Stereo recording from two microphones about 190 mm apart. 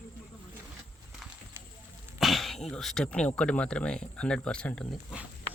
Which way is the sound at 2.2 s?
Centre (ahead or behind).